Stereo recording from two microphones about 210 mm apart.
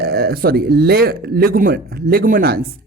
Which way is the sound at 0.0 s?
50° right (ahead or behind).